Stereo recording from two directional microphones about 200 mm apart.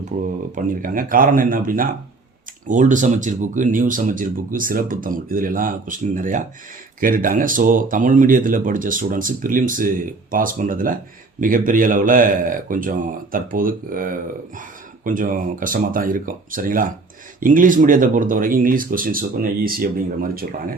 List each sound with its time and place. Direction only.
0.1 s speech: 35° right (ahead or behind)